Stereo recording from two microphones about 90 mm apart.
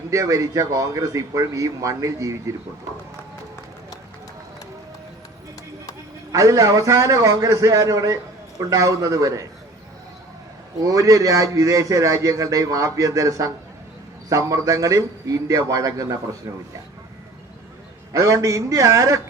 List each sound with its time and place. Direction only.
0.1 s a man's voice: 35° right (ahead or behind)
6.3 s a man's voice: 35° right (ahead or behind)
10.8 s a man's voice: 40° right (ahead or behind)
18.1 s a man's voice: 40° right (ahead or behind)